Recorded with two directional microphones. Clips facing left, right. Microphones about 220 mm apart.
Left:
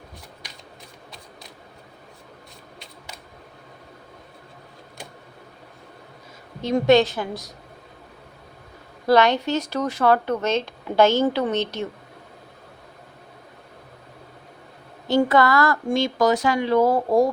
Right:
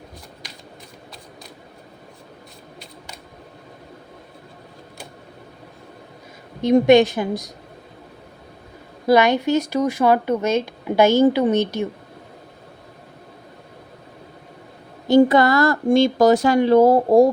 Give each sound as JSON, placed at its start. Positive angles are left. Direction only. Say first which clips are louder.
{"t": 6.8, "sound": "speech", "louder": "even", "side_deg": -15}
{"t": 9.0, "sound": "speech", "louder": "right 2 dB", "side_deg": -10}
{"t": 15.0, "sound": "speech", "louder": "right 5 dB", "side_deg": -15}
{"t": 16.5, "sound": "speech", "louder": "right 6 dB", "side_deg": -45}
{"t": 16.7, "sound": "speech", "louder": "right 5 dB", "side_deg": -30}